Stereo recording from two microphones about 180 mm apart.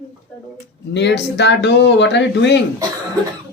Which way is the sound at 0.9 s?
75° left (ahead or behind).